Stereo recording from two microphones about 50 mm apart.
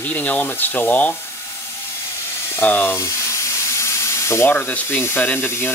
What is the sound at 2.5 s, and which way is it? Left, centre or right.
Speech, left.